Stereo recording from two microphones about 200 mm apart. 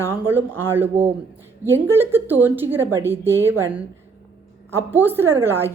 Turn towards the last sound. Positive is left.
turn(degrees=-10)  # may be behind; listen again after turning